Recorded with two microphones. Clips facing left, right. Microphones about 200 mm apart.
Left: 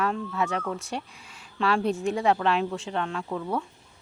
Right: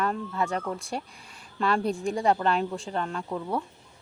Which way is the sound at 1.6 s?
Centre (ahead or behind).